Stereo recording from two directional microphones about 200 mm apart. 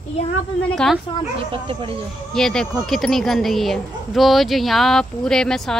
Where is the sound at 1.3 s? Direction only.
25° right (ahead or behind).